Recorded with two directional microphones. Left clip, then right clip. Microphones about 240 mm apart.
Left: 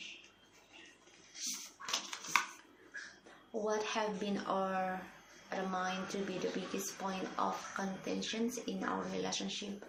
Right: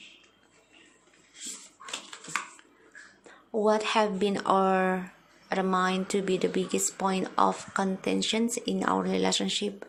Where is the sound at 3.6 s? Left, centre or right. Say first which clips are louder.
Right 11 dB; right.